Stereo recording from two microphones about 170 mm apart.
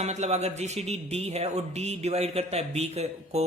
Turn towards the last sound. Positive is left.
turn(degrees=-40)  # may be behind; listen again after turning